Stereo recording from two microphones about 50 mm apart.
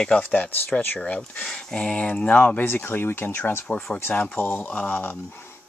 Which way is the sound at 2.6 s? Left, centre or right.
Left.